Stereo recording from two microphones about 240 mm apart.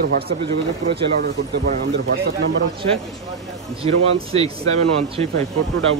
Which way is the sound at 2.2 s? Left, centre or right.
Right.